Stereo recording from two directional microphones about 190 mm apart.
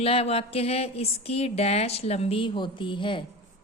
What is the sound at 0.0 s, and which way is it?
Speech, 30° left (ahead or behind).